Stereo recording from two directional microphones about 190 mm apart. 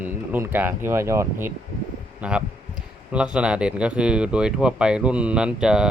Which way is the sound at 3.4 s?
5° right (ahead or behind).